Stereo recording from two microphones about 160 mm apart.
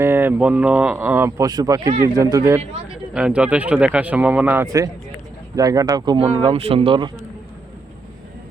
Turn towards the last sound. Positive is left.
turn(degrees=-35)  # may be behind; listen again after turning